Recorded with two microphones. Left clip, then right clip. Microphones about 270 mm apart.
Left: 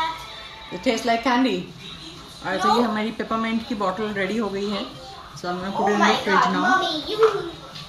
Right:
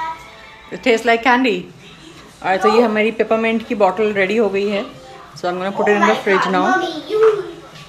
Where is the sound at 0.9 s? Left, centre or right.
Right.